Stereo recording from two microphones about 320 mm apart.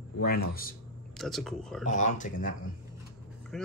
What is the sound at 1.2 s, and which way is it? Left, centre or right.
Speech, centre.